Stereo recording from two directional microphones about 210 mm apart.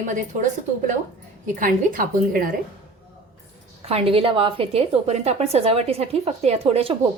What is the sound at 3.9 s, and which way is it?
A woman's voice, 25° right (ahead or behind).